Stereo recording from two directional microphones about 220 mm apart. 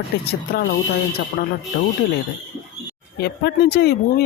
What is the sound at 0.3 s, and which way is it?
Speech, 50° left (ahead or behind).